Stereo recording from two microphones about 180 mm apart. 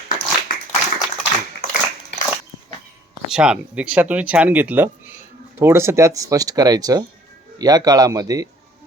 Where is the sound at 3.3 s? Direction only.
5° right (ahead or behind).